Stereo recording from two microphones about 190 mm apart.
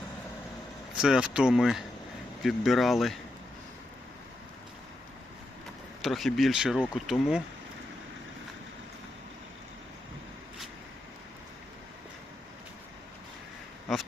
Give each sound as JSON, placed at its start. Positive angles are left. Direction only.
{"t": 0.9, "sound": "speech", "side_deg": -5}
{"t": 6.0, "sound": "speech", "side_deg": 0}